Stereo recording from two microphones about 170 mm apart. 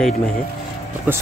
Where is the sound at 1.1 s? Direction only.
10° right (ahead or behind).